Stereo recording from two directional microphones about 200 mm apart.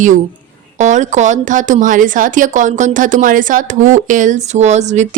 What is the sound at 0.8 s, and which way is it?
A woman's voice, 35° right (ahead or behind).